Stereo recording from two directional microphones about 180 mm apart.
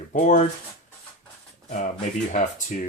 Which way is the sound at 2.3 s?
45° left (ahead or behind).